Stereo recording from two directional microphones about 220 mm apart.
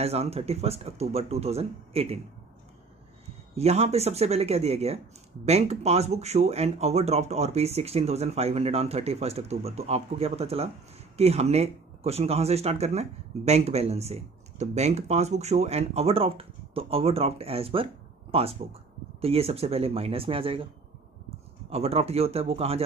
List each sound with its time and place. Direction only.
0.0 s speech: 30° right (ahead or behind)
3.5 s speech: 30° right (ahead or behind)
21.6 s speech: 25° right (ahead or behind)